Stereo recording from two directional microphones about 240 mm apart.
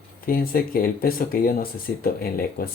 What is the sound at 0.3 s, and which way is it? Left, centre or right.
Speech, left.